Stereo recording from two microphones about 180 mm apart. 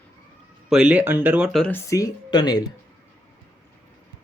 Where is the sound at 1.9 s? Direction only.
20° left (ahead or behind).